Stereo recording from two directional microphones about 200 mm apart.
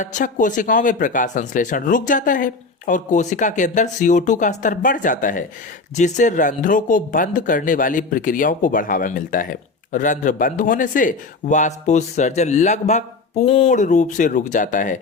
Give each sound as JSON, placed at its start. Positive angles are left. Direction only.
{"t": 0.0, "sound": "speech", "side_deg": 40}